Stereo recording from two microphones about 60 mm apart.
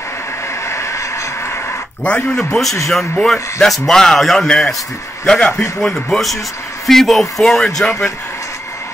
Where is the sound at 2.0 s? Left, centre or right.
Left.